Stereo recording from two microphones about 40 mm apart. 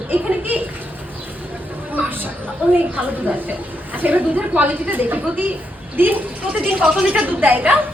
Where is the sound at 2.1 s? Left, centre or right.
Right.